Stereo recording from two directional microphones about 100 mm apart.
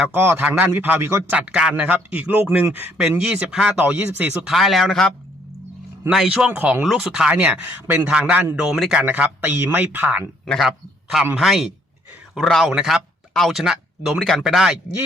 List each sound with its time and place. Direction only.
0.1 s a man's voice: 20° right (ahead or behind)
1.4 s a man's voice: 10° right (ahead or behind)
4.4 s a man's voice: 5° right (ahead or behind)
6.5 s a man's voice: 20° right (ahead or behind)
6.8 s a man's voice: 5° right (ahead or behind)
10.4 s a man's voice: centre (ahead or behind)